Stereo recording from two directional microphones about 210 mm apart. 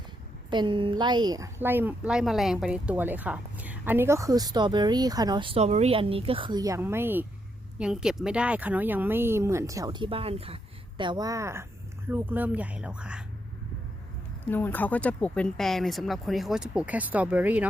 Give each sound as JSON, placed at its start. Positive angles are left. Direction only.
{"t": 0.5, "sound": "a woman's voice", "side_deg": -20}
{"t": 14.5, "sound": "speech", "side_deg": 10}